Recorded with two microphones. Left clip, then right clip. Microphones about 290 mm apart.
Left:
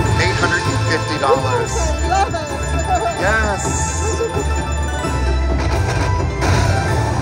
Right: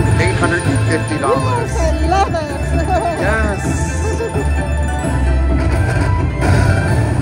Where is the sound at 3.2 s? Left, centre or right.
Centre.